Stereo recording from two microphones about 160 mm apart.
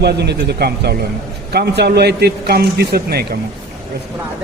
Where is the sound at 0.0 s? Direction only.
90° right.